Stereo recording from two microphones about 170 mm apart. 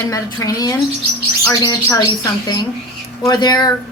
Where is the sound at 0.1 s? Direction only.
20° left (ahead or behind).